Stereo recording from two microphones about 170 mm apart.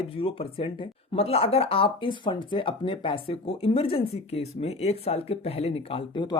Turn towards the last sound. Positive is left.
turn(degrees=30)  # may be behind; listen again after turning